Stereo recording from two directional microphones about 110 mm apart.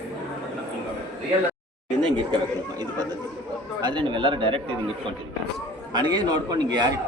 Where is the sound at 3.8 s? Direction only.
45° right (ahead or behind).